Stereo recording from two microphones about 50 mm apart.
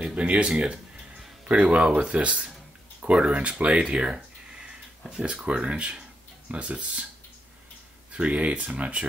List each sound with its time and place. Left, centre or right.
0.1 s speech: right
3.9 s a sound: centre
5.2 s speech: right
8.1 s speech: right